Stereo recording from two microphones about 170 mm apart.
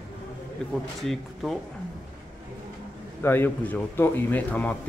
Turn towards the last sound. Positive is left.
turn(degrees=10)  # may be behind; listen again after turning